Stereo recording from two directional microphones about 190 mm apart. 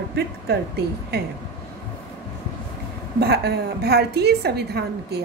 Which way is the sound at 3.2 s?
55° right (ahead or behind).